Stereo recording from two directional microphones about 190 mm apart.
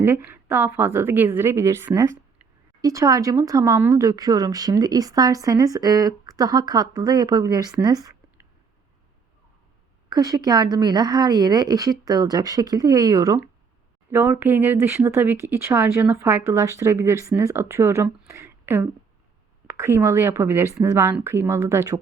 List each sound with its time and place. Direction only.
0.0 s a woman's voice: 10° right (ahead or behind)
10.1 s speech: 20° right (ahead or behind)